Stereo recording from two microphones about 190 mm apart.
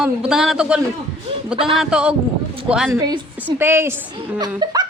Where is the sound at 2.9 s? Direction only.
20° right (ahead or behind).